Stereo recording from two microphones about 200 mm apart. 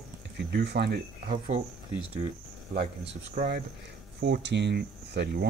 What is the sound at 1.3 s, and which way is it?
Speech, 35° right (ahead or behind).